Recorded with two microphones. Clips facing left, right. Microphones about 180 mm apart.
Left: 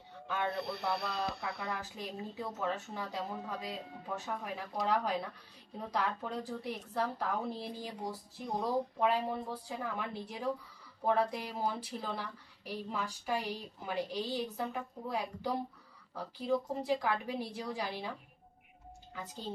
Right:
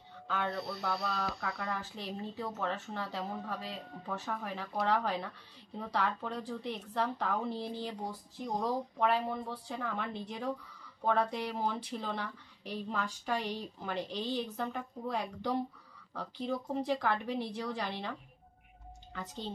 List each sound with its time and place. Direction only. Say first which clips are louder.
0.7 s speech: even; 60° left (ahead or behind)
2.0 s a woman's voice: right 1 dB; 10° left (ahead or behind)
19.1 s a woman's voice: right 2 dB; 10° left (ahead or behind)